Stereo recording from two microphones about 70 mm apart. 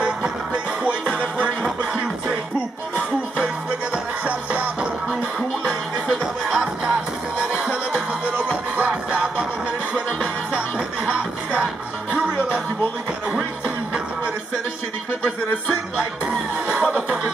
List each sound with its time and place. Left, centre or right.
1.4 s music: centre
3.9 s music: centre
16.6 s music: centre